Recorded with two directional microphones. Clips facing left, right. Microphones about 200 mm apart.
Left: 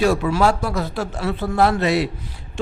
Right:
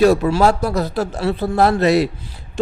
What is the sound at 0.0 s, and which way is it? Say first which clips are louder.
A man's voice: right 4 dB; 40° right (ahead or behind).